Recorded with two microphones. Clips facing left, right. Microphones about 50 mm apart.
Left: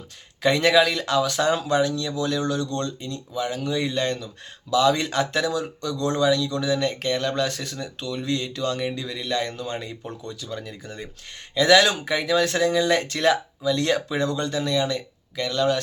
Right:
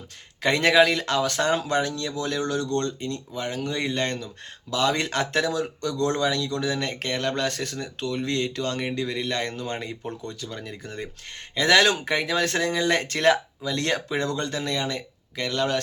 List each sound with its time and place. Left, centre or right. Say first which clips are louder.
0.4 s speech: even; right